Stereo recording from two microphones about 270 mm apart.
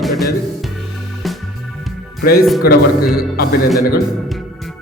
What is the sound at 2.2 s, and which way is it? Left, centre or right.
Speech, left.